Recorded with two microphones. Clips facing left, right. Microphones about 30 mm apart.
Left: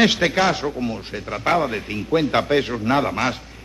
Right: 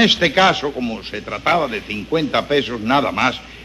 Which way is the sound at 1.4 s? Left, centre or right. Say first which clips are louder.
Right 2 dB; centre.